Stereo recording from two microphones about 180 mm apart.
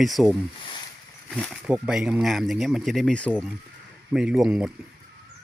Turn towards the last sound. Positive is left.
turn(degrees=-5)  # may be behind; listen again after turning